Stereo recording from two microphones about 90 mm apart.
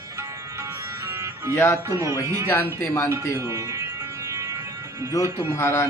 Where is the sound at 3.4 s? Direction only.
35° right (ahead or behind).